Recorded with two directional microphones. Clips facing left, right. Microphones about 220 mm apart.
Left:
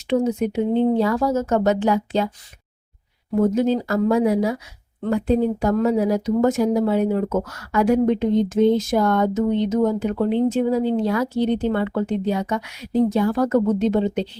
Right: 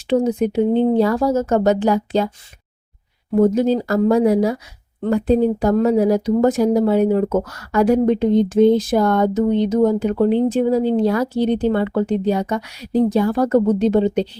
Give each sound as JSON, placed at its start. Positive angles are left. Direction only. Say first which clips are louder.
{"t": 0.1, "sound": "speech", "louder": "right 3 dB", "side_deg": -35}
{"t": 3.5, "sound": "speech", "louder": "right 2 dB", "side_deg": -35}